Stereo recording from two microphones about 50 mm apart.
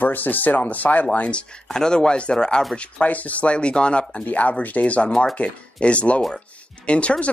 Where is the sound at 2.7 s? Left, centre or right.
Left.